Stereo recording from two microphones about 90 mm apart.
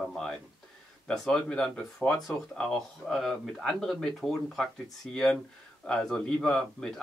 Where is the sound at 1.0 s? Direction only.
5° left (ahead or behind).